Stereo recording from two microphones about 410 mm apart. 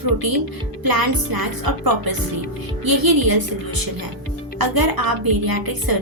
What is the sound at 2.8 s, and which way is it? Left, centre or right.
Speech, right.